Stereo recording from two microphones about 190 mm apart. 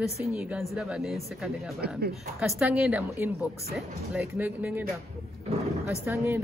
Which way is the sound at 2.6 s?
5° right (ahead or behind).